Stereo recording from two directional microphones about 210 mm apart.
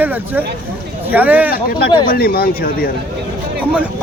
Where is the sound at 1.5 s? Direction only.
45° left (ahead or behind).